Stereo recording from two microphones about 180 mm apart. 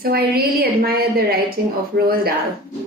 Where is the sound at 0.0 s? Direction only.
60° right (ahead or behind).